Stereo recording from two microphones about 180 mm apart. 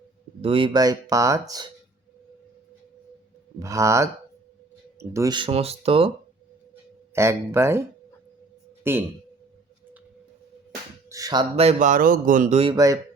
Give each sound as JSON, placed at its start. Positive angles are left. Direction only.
{"t": 0.4, "sound": "speech", "side_deg": -30}
{"t": 3.6, "sound": "speech", "side_deg": -15}
{"t": 7.1, "sound": "speech", "side_deg": -15}
{"t": 8.8, "sound": "speech", "side_deg": -10}
{"t": 11.1, "sound": "speech", "side_deg": -20}
{"t": 11.5, "sound": "speech", "side_deg": -40}
{"t": 12.7, "sound": "speech", "side_deg": -20}